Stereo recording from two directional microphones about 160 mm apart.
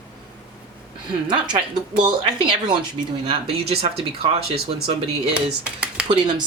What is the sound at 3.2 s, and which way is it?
Speech, 35° right (ahead or behind).